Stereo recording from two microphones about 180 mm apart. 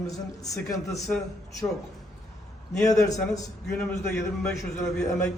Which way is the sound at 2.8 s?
20° left (ahead or behind).